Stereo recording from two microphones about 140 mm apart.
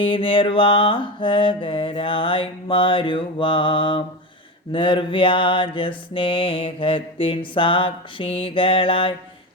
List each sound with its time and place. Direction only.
0.0 s mantra: 35° left (ahead or behind)